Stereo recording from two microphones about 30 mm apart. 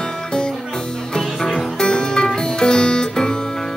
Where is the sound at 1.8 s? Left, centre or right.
Left.